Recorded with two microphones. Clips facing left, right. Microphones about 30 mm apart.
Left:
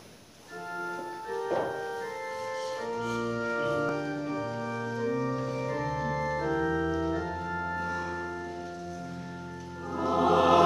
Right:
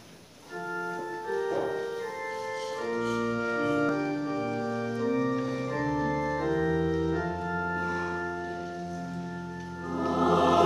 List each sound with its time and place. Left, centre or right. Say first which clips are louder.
3.2 s music: right 2 dB; centre
4.7 s organ: right 2 dB; centre
5.1 s organ: right 3 dB; right
5.9 s organ: right 2 dB; centre
7.8 s music: right 2 dB; centre
9.9 s music: left 1 dB; centre